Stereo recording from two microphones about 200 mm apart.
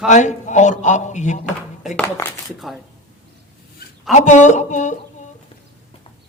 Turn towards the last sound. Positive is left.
turn(degrees=35)  # may be behind; listen again after turning